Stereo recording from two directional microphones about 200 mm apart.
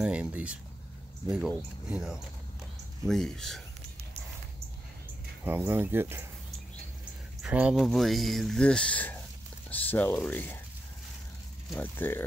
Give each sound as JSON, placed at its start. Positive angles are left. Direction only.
{"t": 0.0, "sound": "speech", "side_deg": -5}
{"t": 5.4, "sound": "speech", "side_deg": -10}
{"t": 7.4, "sound": "speech", "side_deg": -5}
{"t": 11.7, "sound": "speech", "side_deg": 10}